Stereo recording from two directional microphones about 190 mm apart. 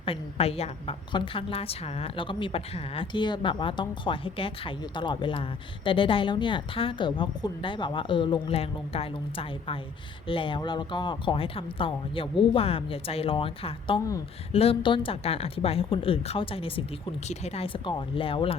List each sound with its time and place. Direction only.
0.0 s a woman's voice: 30° left (ahead or behind)